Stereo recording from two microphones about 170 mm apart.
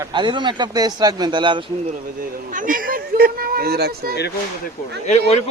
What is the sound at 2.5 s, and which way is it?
Speech, 55° right (ahead or behind).